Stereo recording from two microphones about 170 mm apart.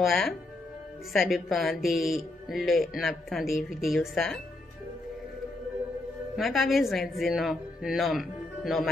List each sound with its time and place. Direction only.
0.0 s speech: centre (ahead or behind)
6.3 s speech: centre (ahead or behind)